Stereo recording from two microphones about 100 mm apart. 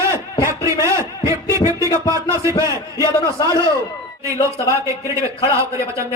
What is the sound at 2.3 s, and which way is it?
Speech, 30° right (ahead or behind).